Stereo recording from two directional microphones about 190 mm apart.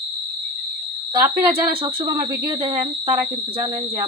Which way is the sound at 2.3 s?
25° right (ahead or behind).